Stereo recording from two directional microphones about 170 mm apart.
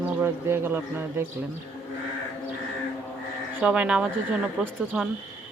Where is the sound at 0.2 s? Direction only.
15° right (ahead or behind).